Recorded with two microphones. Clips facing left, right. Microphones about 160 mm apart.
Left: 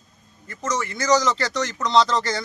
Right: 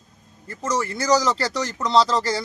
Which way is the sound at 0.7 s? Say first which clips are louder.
Even; 35° right (ahead or behind).